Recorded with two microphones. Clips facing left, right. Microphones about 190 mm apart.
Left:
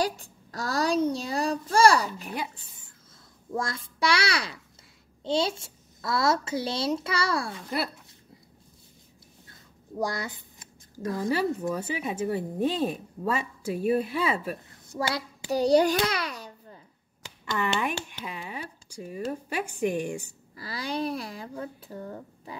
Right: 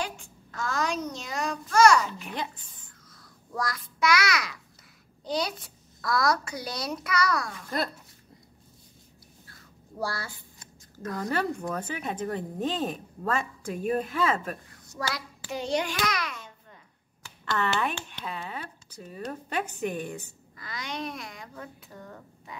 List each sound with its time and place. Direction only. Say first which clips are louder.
0.0 s a child's voice: left 6 dB; 35° left (ahead or behind)
3.5 s a child's voice: left 1 dB; 25° left (ahead or behind)
9.5 s writing: left 7 dB; 20° left (ahead or behind)
11.2 s a woman's voice: left 3 dB; 10° left (ahead or behind)
14.7 s hands: left 7 dB; 25° left (ahead or behind)
17.5 s speech: even; 15° left (ahead or behind)
20.5 s a child's voice: left 5 dB; 35° left (ahead or behind)